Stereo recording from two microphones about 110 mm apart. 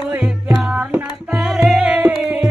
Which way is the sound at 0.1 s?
10° right (ahead or behind).